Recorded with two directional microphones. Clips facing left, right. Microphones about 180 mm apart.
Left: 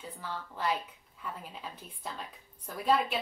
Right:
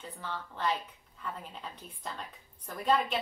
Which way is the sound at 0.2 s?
10° left (ahead or behind).